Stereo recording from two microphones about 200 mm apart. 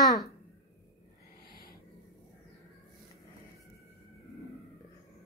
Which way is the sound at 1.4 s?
50° left (ahead or behind).